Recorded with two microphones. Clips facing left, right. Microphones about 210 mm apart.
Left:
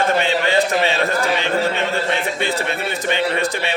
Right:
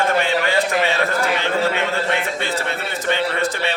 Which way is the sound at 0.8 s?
20° left (ahead or behind).